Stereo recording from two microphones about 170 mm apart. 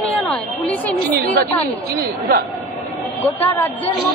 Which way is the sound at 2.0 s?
65° right (ahead or behind).